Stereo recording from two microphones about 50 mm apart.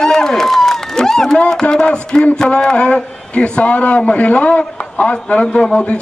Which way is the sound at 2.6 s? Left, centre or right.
Left.